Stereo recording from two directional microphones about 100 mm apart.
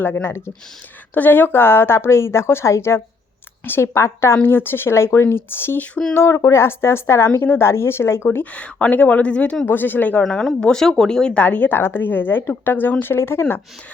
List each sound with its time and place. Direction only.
0.0 s a woman's voice: 20° left (ahead or behind)
6.1 s a woman's voice: 30° left (ahead or behind)
8.5 s speech: 15° left (ahead or behind)
10.2 s a woman's voice: 5° left (ahead or behind); by 13.4 s 25° left (ahead or behind)